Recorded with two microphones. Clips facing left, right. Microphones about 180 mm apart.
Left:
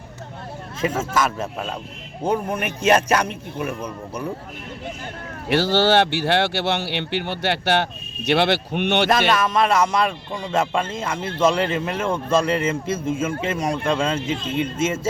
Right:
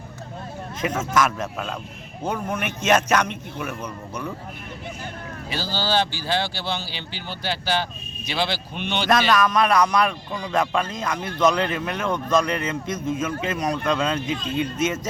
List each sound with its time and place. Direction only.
0.8 s speech: 30° left (ahead or behind)
5.5 s speech: 75° left (ahead or behind)
9.3 s speech: 25° left (ahead or behind)